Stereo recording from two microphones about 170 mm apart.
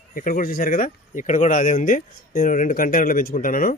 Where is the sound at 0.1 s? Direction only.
55° left (ahead or behind).